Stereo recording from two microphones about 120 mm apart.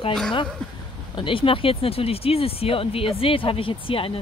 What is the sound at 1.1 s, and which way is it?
Speech, 45° left (ahead or behind).